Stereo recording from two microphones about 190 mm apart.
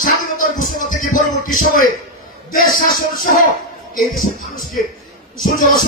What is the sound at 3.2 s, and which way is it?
Music, 50° left (ahead or behind).